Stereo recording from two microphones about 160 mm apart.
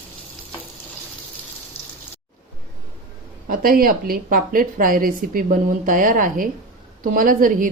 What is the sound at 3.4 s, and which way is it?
A woman's voice, 65° right (ahead or behind).